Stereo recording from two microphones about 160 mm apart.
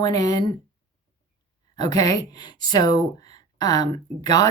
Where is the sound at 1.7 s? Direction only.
25° left (ahead or behind).